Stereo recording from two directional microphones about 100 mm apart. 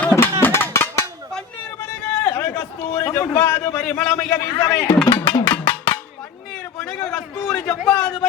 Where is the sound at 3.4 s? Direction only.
25° left (ahead or behind).